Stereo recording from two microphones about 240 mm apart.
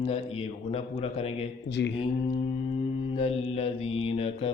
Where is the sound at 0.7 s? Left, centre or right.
Left.